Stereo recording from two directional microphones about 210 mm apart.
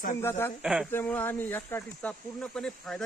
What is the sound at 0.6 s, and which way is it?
Speech, centre (ahead or behind).